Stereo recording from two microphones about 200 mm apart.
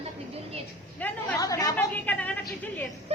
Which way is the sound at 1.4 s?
15° left (ahead or behind).